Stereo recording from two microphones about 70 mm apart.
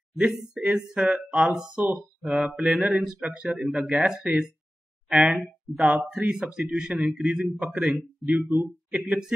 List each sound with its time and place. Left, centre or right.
0.2 s speech: centre
2.6 s mantra: centre
3.0 s speech: centre
7.1 s mantra: centre
7.5 s speech: centre